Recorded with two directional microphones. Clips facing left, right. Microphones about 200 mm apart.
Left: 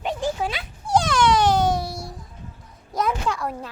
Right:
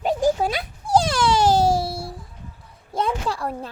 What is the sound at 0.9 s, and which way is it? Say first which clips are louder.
Baby cry: even; 30° right (ahead or behind).